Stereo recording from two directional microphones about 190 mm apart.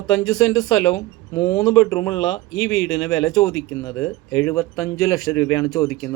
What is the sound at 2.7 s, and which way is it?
Speech, 90° left.